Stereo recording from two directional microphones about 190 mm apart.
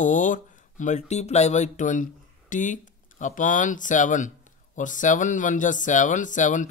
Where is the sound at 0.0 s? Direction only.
40° left (ahead or behind).